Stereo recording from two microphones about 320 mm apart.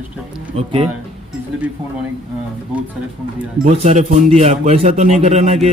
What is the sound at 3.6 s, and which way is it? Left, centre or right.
A man's voice, right.